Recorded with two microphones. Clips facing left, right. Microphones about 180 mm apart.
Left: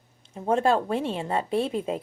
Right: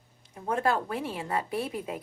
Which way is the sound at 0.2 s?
25° left (ahead or behind).